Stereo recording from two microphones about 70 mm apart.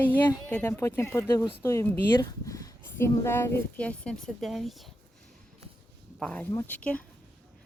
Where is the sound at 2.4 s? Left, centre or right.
Left.